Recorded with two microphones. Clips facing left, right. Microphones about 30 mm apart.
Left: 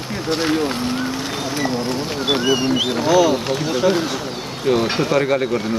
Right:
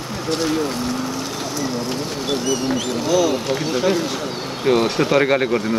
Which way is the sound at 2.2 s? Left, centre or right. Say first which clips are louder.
Left 4 dB; left.